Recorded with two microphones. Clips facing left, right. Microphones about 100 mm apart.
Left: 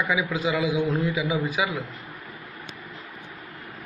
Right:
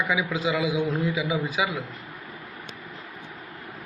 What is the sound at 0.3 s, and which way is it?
Speech, 20° right (ahead or behind).